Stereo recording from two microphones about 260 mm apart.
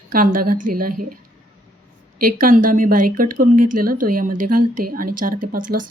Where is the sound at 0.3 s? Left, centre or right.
Right.